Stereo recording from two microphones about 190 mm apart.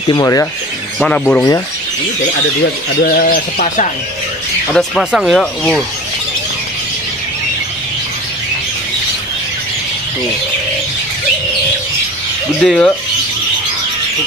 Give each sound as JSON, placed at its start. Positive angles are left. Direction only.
{"t": 0.1, "sound": "speech", "side_deg": 15}
{"t": 0.9, "sound": "speech", "side_deg": 5}
{"t": 3.0, "sound": "speech", "side_deg": 50}
{"t": 4.6, "sound": "speech", "side_deg": 5}
{"t": 12.6, "sound": "speech", "side_deg": 5}